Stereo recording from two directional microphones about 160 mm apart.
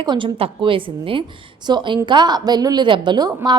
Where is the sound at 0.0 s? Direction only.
30° right (ahead or behind).